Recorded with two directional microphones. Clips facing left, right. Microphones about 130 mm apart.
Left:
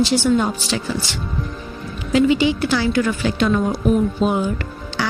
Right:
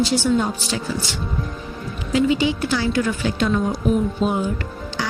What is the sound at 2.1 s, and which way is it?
Speech, 75° left (ahead or behind).